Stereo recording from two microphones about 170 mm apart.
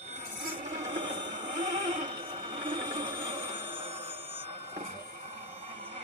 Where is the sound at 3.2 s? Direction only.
35° right (ahead or behind).